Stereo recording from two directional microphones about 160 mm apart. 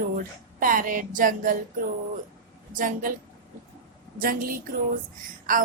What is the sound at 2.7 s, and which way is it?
Speech, 55° right (ahead or behind).